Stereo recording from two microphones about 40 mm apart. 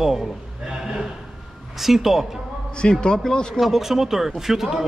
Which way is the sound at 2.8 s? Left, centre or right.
Left.